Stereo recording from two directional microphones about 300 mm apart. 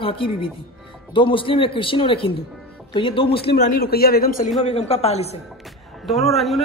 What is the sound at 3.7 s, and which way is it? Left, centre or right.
A man's voice, left.